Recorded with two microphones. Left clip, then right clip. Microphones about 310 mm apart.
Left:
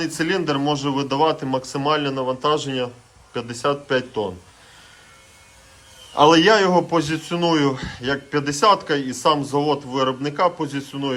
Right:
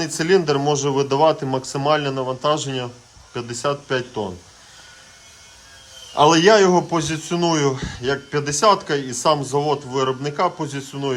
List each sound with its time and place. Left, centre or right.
0.0 s a man's voice: centre
6.1 s a man's voice: centre